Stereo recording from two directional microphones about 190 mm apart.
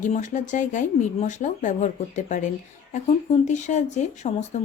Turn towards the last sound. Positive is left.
turn(degrees=35)  # may be behind; listen again after turning